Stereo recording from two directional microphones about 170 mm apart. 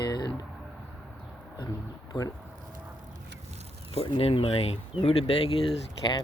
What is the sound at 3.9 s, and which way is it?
Speech, 35° left (ahead or behind).